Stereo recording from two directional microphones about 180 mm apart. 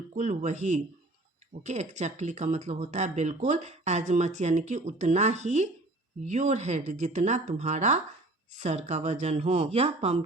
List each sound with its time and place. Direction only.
0.1 s speech: 40° right (ahead or behind)